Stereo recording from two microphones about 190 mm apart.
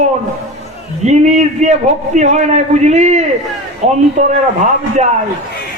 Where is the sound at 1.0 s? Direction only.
35° right (ahead or behind).